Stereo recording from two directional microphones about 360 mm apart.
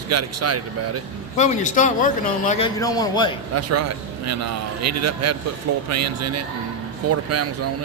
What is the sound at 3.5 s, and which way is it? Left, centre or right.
A man's voice, right.